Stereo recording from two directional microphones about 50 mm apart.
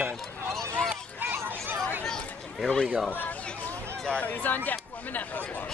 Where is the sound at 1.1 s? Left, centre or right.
Right.